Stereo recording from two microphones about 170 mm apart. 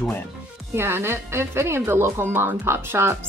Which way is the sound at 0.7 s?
15° right (ahead or behind).